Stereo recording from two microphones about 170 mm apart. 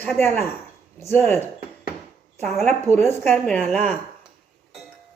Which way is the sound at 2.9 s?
15° left (ahead or behind).